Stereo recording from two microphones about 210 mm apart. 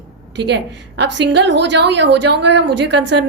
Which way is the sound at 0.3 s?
55° right (ahead or behind).